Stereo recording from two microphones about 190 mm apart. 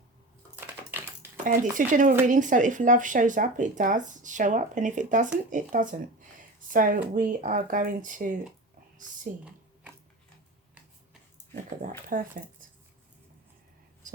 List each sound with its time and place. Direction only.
0.7 s typing: 10° right (ahead or behind)
1.7 s speech: 45° right (ahead or behind)
12.0 s speech: 45° right (ahead or behind)